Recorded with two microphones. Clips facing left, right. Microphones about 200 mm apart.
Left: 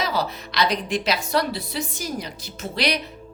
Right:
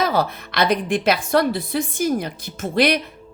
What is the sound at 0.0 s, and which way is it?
A woman's voice, 55° right (ahead or behind).